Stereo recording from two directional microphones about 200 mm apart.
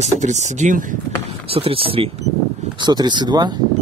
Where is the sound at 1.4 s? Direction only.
30° right (ahead or behind).